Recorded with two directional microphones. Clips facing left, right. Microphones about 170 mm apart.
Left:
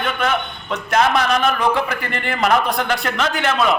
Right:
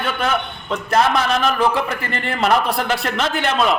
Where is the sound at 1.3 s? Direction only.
Centre (ahead or behind).